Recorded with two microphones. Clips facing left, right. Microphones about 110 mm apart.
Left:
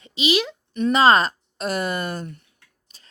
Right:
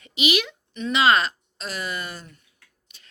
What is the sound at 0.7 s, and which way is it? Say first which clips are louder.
Speech: left 4 dB; 50° left (ahead or behind).